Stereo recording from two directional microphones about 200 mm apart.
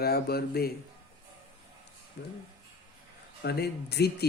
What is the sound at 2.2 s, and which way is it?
Speech, 55° left (ahead or behind).